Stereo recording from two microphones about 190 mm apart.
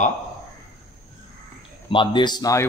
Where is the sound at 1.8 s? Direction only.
25° left (ahead or behind).